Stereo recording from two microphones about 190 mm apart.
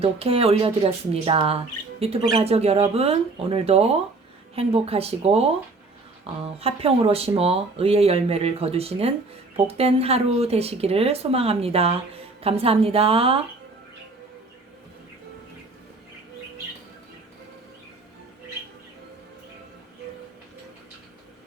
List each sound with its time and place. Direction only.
0.0 s speech: 30° right (ahead or behind)